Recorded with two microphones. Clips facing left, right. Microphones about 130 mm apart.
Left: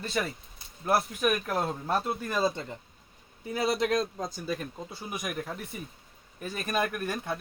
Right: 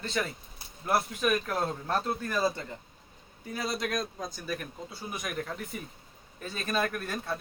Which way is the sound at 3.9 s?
30° left (ahead or behind).